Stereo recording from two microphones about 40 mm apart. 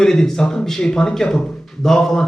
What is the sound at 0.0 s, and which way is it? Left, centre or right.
A man's voice, centre.